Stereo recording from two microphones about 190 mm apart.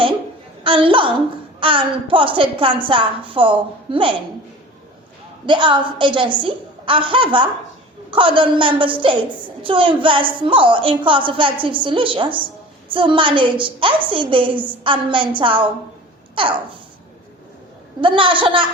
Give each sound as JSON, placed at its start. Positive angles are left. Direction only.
{"t": 0.6, "sound": "a woman's voice", "side_deg": -25}
{"t": 5.5, "sound": "a woman's voice", "side_deg": -25}
{"t": 16.3, "sound": "babbling", "side_deg": -25}
{"t": 18.0, "sound": "a woman's voice", "side_deg": -25}